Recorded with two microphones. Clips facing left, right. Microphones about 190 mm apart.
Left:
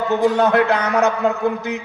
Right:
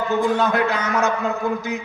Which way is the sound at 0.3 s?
65° left (ahead or behind).